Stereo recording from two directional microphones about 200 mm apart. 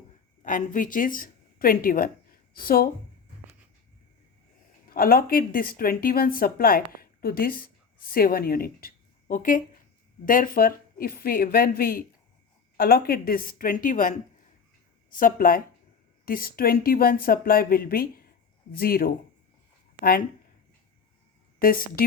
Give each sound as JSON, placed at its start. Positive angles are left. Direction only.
{"t": 0.4, "sound": "a woman's voice", "side_deg": 40}
{"t": 4.9, "sound": "speech", "side_deg": 45}
{"t": 21.6, "sound": "speech", "side_deg": 45}